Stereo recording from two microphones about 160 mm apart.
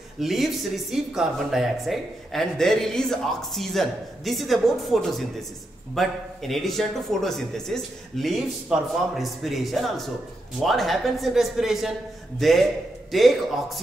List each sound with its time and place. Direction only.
0.2 s speech: centre (ahead or behind)